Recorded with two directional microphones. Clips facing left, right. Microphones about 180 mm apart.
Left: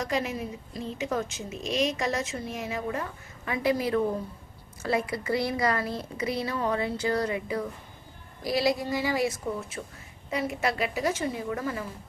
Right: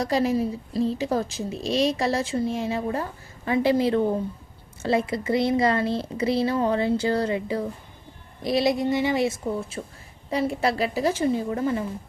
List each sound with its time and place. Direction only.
0.0 s a woman's voice: 35° right (ahead or behind)